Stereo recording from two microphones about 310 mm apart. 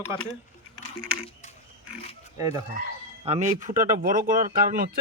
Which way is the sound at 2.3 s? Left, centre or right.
Centre.